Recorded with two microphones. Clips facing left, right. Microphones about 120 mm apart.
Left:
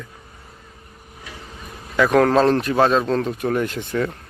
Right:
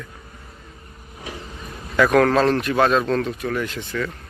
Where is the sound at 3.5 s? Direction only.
45° left (ahead or behind).